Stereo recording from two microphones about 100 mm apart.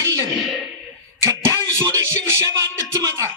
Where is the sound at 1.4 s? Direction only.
25° right (ahead or behind).